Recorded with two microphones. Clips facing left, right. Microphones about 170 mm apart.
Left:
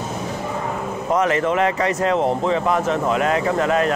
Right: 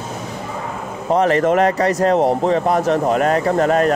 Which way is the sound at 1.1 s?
35° right (ahead or behind).